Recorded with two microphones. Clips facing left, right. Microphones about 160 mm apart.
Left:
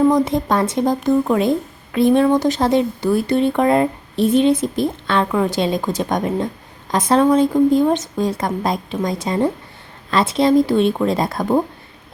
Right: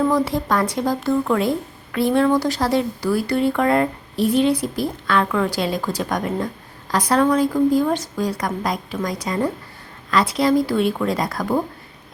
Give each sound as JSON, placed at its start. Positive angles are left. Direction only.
{"t": 0.1, "sound": "speech", "side_deg": 20}